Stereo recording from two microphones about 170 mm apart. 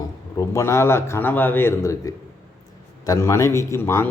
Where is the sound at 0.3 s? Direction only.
15° left (ahead or behind).